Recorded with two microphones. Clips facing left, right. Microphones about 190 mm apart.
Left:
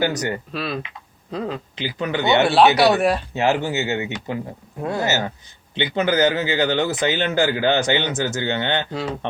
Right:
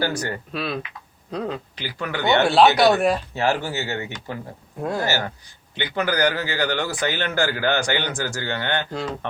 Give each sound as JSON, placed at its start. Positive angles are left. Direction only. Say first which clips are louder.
{"t": 0.0, "sound": "a man's voice", "louder": "left 3 dB", "side_deg": 20}
{"t": 0.5, "sound": "speech", "louder": "left 1 dB", "side_deg": 0}
{"t": 1.8, "sound": "a man's voice", "louder": "left 4 dB", "side_deg": 20}
{"t": 2.4, "sound": "speech", "louder": "even", "side_deg": 0}
{"t": 3.3, "sound": "a man's voice", "louder": "left 3 dB", "side_deg": 20}
{"t": 4.8, "sound": "speech", "louder": "left 1 dB", "side_deg": 0}
{"t": 5.7, "sound": "a man's voice", "louder": "left 4 dB", "side_deg": 20}